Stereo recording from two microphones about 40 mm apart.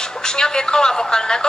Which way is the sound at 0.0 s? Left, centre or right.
Centre.